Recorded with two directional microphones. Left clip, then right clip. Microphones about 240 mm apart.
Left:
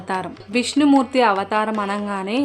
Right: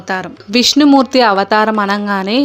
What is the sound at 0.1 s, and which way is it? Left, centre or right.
Speech, centre.